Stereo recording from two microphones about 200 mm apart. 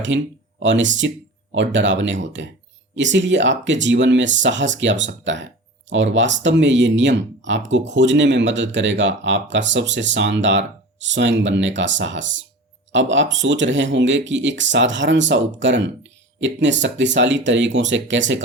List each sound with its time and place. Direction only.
0.1 s speech: 70° right (ahead or behind)